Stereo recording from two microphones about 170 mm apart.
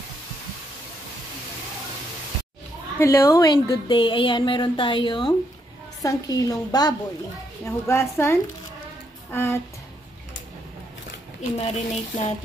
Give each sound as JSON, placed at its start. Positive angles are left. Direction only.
{"t": 3.0, "sound": "a woman's voice", "side_deg": 15}
{"t": 11.5, "sound": "speech", "side_deg": 40}